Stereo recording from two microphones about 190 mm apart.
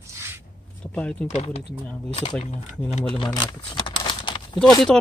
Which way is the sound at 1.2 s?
35° left (ahead or behind).